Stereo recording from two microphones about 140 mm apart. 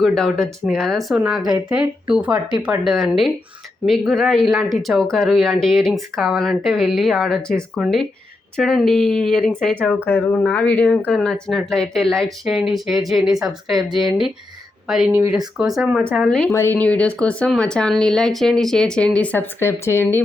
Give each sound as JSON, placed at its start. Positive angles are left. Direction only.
{"t": 0.0, "sound": "speech", "side_deg": 5}
{"t": 10.1, "sound": "speech", "side_deg": 15}
{"t": 16.5, "sound": "speech", "side_deg": 20}
{"t": 16.7, "sound": "speech", "side_deg": 10}